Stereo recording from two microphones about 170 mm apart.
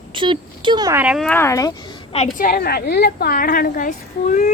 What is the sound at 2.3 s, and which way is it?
A woman's voice, 60° left (ahead or behind).